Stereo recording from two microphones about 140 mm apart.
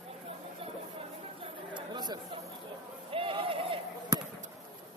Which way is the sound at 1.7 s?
30° right (ahead or behind).